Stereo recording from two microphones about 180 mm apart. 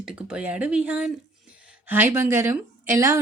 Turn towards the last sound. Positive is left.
turn(degrees=-15)  # may be behind; listen again after turning